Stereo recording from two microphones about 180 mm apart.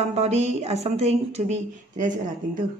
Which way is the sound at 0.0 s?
35° right (ahead or behind).